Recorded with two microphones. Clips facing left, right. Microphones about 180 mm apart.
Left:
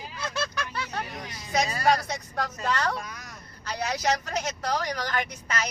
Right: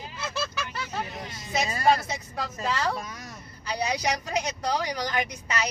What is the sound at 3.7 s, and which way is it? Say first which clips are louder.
A woman's voice: even; 15° right (ahead or behind).